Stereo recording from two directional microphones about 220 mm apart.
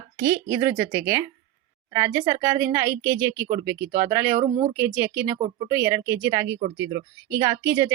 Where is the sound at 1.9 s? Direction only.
15° right (ahead or behind).